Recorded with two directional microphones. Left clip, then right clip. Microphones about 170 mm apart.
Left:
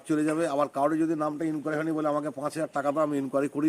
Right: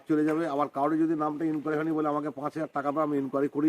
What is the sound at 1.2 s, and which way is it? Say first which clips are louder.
Speech: even; 10° left (ahead or behind).